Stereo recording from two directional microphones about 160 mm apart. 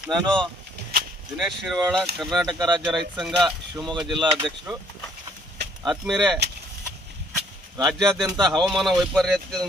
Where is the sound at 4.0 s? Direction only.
30° right (ahead or behind).